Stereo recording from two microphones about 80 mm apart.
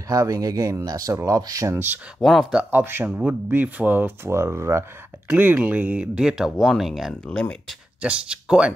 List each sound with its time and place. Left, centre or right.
0.1 s speech: right
2.1 s speech: centre
2.7 s speech: right
5.3 s speech: centre
6.1 s speech: centre
7.2 s speech: centre
8.0 s speech: centre